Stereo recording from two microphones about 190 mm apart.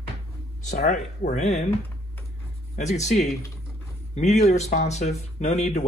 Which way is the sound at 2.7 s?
35° left (ahead or behind).